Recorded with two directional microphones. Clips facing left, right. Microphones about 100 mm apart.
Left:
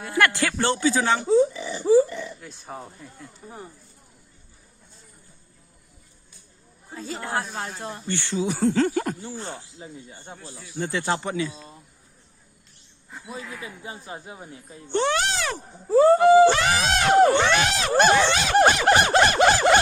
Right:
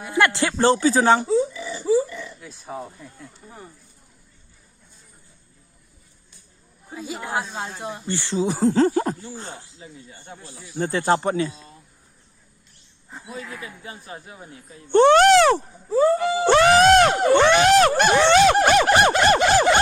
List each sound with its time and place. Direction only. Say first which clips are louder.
0.0 s speech: right 2 dB; 20° right (ahead or behind); by 1.2 s 40° right (ahead or behind)
1.5 s a sound: left 3 dB; 35° left (ahead or behind)
2.4 s speech: right 4 dB; centre (ahead or behind)
6.9 s speech: right 1 dB; 15° right (ahead or behind); by 9.1 s 30° right (ahead or behind)
9.4 s speech: left 2 dB; 35° left (ahead or behind)
10.8 s speech: right 5 dB; 45° right (ahead or behind)
13.1 s a sound: right 1 dB; 25° right (ahead or behind)
13.3 s speech: right 1 dB; 20° left (ahead or behind)
14.9 s speech: right 11 dB; 50° right (ahead or behind)
15.9 s speech: left 4 dB; 35° left (ahead or behind)
16.5 s a sound: right 8 dB; 55° right (ahead or behind)